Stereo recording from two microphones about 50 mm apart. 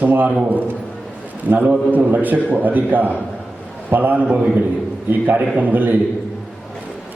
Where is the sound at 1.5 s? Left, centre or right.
Right.